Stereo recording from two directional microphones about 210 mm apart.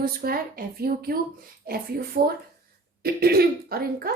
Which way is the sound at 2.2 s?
45° right (ahead or behind).